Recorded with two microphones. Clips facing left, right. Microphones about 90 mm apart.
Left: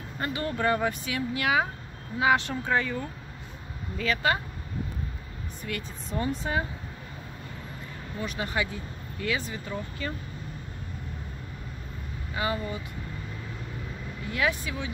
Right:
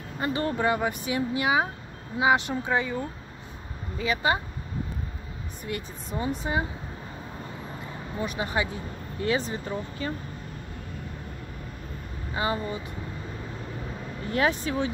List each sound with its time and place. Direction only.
0.3 s speech: 30° right (ahead or behind)
0.6 s speech: 10° right (ahead or behind)
1.1 s speech: 25° right (ahead or behind)
5.7 s speech: 15° right (ahead or behind)
8.2 s speech: 20° right (ahead or behind)
12.4 s speech: 30° right (ahead or behind)
14.2 s speech: 35° right (ahead or behind)